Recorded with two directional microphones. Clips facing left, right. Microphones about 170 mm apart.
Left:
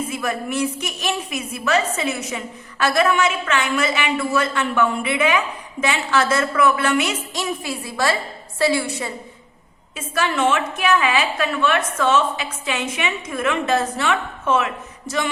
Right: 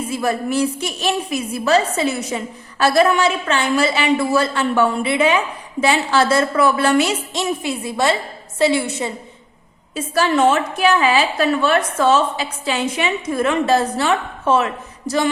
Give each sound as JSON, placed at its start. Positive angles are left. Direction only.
{"t": 0.1, "sound": "a woman's voice", "side_deg": -35}
{"t": 9.9, "sound": "a woman's voice", "side_deg": -35}